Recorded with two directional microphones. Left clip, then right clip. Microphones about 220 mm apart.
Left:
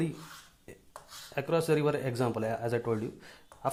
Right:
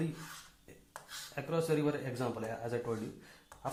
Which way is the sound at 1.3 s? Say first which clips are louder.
Left 6 dB; 50° left (ahead or behind).